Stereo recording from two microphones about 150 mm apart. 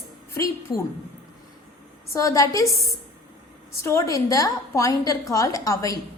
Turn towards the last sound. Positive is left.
turn(degrees=20)  # may be behind; listen again after turning